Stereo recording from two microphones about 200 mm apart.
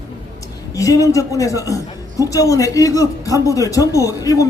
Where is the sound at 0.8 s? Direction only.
15° left (ahead or behind).